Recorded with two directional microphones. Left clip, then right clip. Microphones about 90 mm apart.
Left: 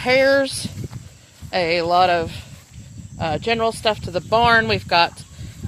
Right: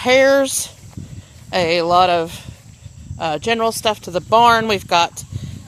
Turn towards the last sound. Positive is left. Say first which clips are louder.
# right 1 dB
turn(degrees=-45)  # may be behind; listen again after turning